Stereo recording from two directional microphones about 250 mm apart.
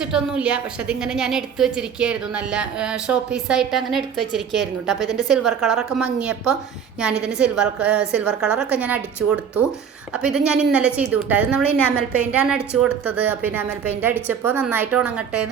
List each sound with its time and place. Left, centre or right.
0.0 s a woman's voice: centre